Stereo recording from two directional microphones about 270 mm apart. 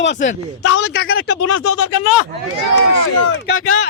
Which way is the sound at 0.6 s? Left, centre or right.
Left.